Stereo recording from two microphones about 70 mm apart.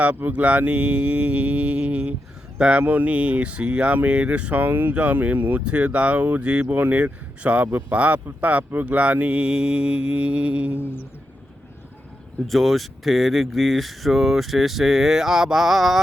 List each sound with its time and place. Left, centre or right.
0.0 s speech: right
2.8 s speech: right
12.5 s speech: centre